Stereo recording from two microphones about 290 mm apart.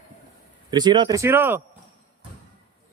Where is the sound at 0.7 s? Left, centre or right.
Centre.